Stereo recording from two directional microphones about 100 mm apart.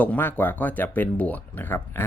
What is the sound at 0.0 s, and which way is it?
Speech, 20° left (ahead or behind).